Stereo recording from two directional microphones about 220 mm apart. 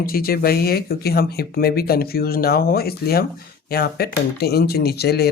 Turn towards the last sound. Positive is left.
turn(degrees=45)  # may be behind; listen again after turning